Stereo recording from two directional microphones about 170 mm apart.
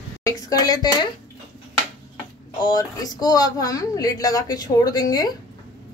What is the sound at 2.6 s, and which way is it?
Speech, 20° left (ahead or behind).